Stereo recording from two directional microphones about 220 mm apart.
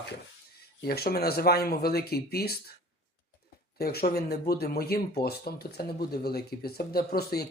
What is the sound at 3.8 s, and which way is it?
Speech, 45° left (ahead or behind).